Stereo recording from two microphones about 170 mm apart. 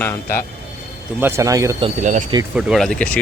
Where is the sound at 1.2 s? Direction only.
20° right (ahead or behind).